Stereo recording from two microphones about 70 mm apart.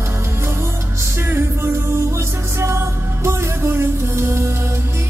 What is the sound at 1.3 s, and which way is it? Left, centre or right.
Music, right.